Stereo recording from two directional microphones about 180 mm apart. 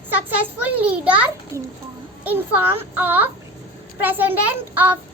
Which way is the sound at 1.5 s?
15° right (ahead or behind).